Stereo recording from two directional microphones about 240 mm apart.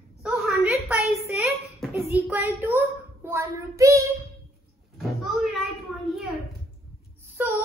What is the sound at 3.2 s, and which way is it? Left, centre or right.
Child singing, centre.